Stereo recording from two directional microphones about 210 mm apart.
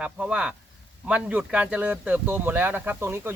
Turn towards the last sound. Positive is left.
turn(degrees=-10)  # may be behind; listen again after turning